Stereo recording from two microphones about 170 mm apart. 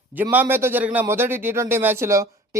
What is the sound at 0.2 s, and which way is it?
Speech, 10° right (ahead or behind).